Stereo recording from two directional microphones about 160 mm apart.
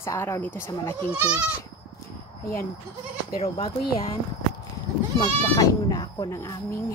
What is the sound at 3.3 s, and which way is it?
Speech, 35° left (ahead or behind).